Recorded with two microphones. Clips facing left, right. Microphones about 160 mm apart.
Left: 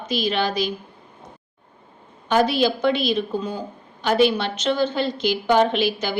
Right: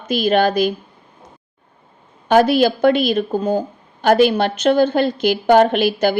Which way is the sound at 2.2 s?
55° right (ahead or behind).